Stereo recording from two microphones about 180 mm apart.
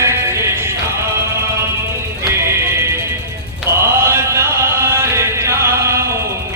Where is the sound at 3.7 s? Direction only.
15° right (ahead or behind).